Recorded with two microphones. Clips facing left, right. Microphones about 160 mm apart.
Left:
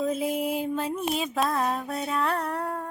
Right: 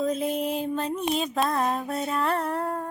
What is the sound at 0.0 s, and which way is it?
Music, 5° left (ahead or behind).